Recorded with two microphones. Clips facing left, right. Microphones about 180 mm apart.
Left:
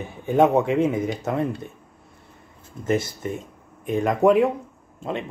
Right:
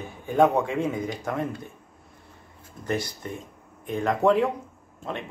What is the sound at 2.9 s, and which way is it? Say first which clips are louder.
Speech: left 6 dB; 20° left (ahead or behind).